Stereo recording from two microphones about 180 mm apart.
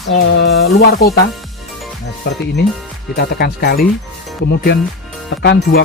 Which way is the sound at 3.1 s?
65° left (ahead or behind).